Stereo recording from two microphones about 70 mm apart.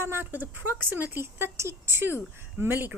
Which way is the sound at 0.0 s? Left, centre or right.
Right.